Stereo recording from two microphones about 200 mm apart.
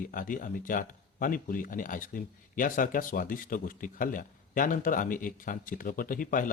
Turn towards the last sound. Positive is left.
turn(degrees=45)  # may be behind; listen again after turning